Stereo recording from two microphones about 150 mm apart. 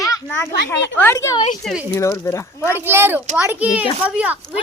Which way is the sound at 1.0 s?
20° left (ahead or behind).